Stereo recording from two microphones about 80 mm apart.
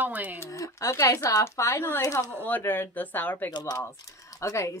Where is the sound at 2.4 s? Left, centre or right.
Left.